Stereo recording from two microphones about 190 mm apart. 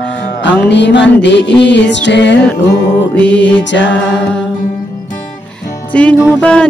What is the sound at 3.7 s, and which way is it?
Music, 70° left (ahead or behind).